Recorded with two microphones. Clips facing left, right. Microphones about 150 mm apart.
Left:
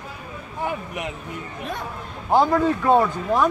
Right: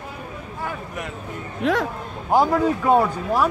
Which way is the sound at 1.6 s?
90° right.